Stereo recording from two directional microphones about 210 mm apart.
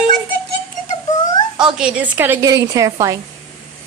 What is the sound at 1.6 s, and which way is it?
Speech, 5° right (ahead or behind).